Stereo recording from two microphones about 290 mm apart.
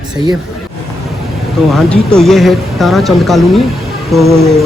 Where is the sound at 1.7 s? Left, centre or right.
Centre.